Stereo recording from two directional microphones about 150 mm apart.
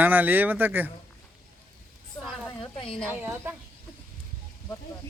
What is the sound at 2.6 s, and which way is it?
Speech, 35° left (ahead or behind).